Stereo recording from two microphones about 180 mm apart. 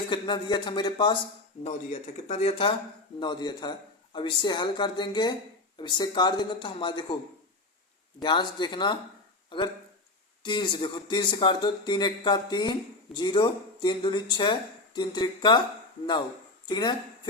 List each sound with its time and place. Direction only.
0.1 s speech: 25° left (ahead or behind)
1.6 s speech: 40° left (ahead or behind)
8.2 s speech: 25° left (ahead or behind)
16.6 s speech: 25° left (ahead or behind)